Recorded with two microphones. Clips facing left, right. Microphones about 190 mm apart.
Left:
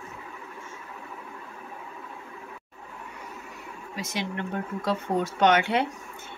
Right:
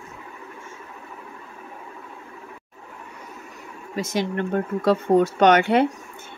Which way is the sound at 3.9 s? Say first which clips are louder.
Right 8 dB; 45° right (ahead or behind).